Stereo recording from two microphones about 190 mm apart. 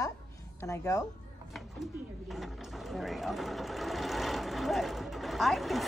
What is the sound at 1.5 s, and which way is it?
Speech, centre (ahead or behind).